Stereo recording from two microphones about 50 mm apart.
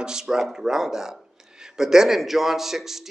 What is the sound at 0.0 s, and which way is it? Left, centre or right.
A man's voice, centre.